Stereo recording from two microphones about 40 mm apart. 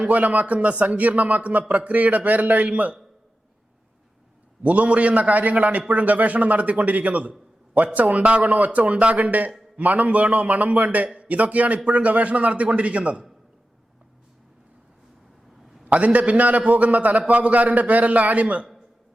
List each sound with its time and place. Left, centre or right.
0.0 s speech: right
4.6 s speech: right
15.8 s speech: right